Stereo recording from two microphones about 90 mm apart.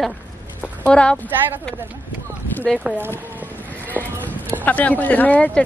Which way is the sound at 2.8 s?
20° right (ahead or behind).